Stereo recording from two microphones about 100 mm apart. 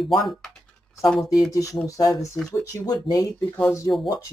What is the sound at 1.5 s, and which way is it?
Speech, 35° left (ahead or behind).